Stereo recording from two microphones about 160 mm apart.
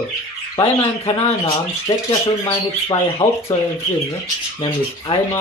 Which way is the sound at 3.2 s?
45° left (ahead or behind).